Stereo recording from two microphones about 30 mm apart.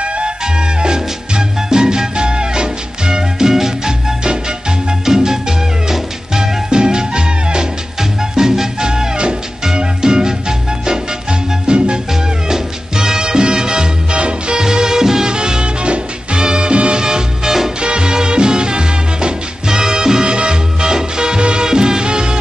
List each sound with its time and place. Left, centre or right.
0.0 s music: right; by 3.9 s centre
4.2 s music: right
5.0 s music: centre
6.7 s music: right
11.6 s music: right
12.1 s music: centre
14.1 s music: right
14.6 s music: right
17.0 s music: centre
17.7 s music: right
19.7 s music: centre